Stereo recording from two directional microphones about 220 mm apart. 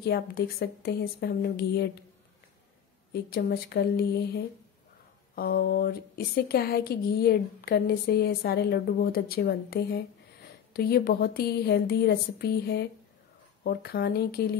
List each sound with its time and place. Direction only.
0.0 s speech: 45° left (ahead or behind)
3.1 s speech: 45° left (ahead or behind)
5.3 s speech: 40° left (ahead or behind)